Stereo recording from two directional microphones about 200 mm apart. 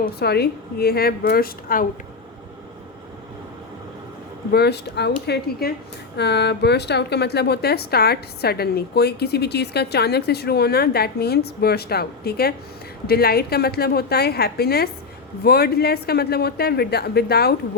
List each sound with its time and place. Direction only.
0.0 s a woman's voice: 55° left (ahead or behind)
4.5 s a woman's voice: 55° left (ahead or behind)